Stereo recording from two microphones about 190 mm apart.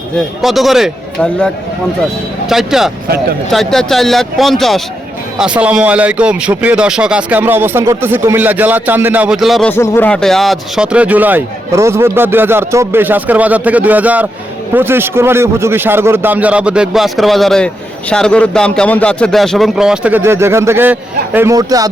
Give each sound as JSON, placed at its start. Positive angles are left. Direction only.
{"t": 0.4, "sound": "a man's voice", "side_deg": 0}
{"t": 2.5, "sound": "a man's voice", "side_deg": 0}
{"t": 9.7, "sound": "a man's voice", "side_deg": 10}